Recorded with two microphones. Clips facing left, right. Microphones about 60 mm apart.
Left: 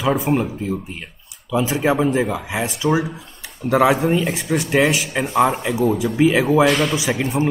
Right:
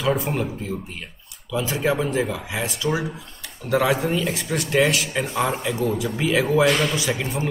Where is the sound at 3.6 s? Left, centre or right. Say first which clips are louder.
Left 5 dB; left.